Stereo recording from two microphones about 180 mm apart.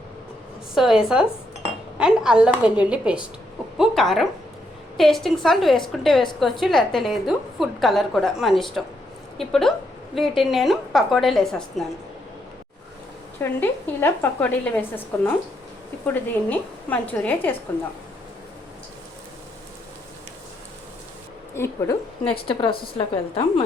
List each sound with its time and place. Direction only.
0.8 s a woman's voice: centre (ahead or behind)
13.4 s a woman's voice: 10° left (ahead or behind)
21.5 s a woman's voice: 15° left (ahead or behind)
23.0 s a woman's voice: 30° left (ahead or behind)